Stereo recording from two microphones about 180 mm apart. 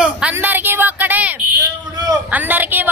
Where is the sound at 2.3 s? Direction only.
10° right (ahead or behind).